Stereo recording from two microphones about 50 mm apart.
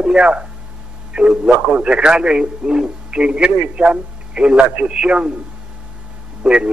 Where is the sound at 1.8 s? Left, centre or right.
Centre.